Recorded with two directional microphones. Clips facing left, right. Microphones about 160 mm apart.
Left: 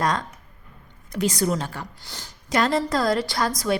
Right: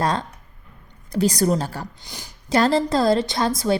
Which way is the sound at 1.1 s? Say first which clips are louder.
Right 4 dB; 35° right (ahead or behind).